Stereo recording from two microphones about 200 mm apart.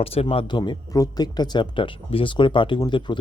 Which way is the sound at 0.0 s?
30° left (ahead or behind).